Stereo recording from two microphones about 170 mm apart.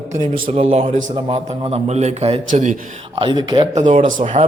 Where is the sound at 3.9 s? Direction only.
50° right (ahead or behind).